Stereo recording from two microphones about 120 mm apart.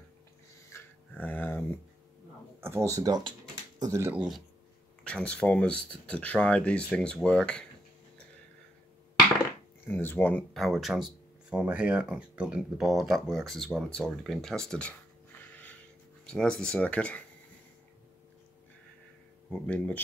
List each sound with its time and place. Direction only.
0.7 s a sound: 20° left (ahead or behind)
2.6 s speech: 20° right (ahead or behind)
4.1 s speech: 10° right (ahead or behind)
5.0 s speech: 10° left (ahead or behind)
9.8 s speech: 15° left (ahead or behind)
10.5 s speech: centre (ahead or behind)
19.6 s speech: 10° left (ahead or behind)